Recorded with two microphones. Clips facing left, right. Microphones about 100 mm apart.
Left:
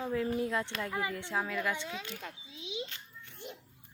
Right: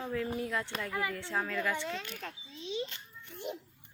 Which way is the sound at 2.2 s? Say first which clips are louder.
Right 2 dB; 10° left (ahead or behind).